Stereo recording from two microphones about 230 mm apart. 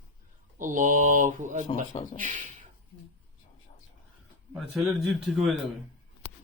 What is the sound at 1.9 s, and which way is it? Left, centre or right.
Dog, left.